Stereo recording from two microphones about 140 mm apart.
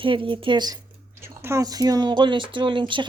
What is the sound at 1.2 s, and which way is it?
Speech, 20° right (ahead or behind).